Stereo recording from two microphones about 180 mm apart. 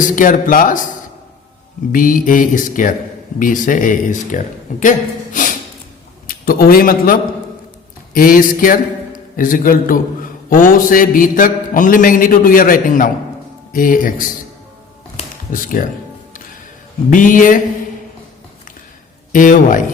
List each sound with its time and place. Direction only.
0.0 s mantra: 50° left (ahead or behind)
1.9 s mantra: 50° left (ahead or behind)
6.2 s a man's voice: 55° left (ahead or behind)
10.5 s mantra: 50° left (ahead or behind)
15.5 s mantra: 50° left (ahead or behind)
17.1 s mantra: 45° left (ahead or behind)
19.3 s mantra: 45° left (ahead or behind)